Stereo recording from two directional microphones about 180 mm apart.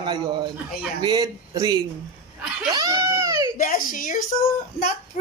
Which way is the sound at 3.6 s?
50° left (ahead or behind).